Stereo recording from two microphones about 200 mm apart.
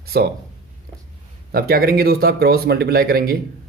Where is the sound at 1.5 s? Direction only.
50° right (ahead or behind).